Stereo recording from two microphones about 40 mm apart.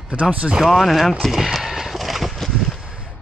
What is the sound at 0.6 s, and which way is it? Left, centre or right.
Speech, centre.